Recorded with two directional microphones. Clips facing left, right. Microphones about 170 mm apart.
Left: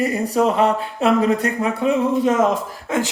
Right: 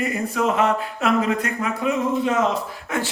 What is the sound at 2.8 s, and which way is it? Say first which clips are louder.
Speech: left 5 dB; 20° left (ahead or behind).